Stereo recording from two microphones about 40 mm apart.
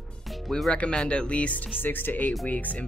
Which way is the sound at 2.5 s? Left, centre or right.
Left.